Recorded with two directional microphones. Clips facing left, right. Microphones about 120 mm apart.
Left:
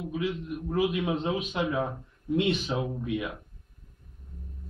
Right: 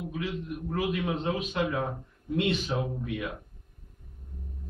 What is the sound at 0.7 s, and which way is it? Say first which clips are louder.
A man's voice: left 3 dB; 20° left (ahead or behind).